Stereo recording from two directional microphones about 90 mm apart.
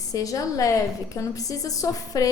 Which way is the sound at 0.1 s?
40° left (ahead or behind).